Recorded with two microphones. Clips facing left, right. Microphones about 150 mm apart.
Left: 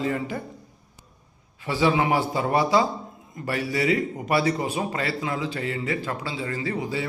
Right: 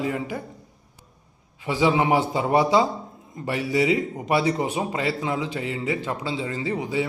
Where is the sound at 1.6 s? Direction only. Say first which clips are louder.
Right 1 dB; 15° right (ahead or behind).